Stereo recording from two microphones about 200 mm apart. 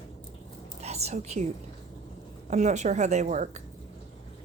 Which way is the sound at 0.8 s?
35° right (ahead or behind).